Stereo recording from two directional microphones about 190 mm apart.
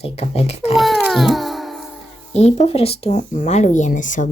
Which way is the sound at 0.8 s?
Centre (ahead or behind).